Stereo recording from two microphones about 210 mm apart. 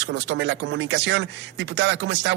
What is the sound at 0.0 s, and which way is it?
A man's voice, 55° right (ahead or behind).